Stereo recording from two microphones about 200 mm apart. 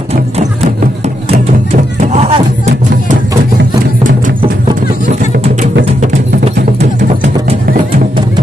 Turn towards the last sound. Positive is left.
turn(degrees=-35)  # may be behind; listen again after turning